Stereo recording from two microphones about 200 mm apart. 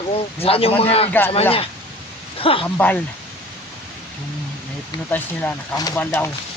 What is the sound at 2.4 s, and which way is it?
Speech, 25° left (ahead or behind).